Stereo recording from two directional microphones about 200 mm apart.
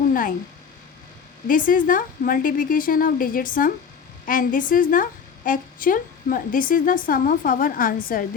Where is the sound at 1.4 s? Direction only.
45° left (ahead or behind).